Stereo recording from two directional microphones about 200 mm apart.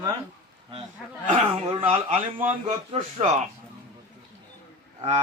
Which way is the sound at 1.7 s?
30° right (ahead or behind).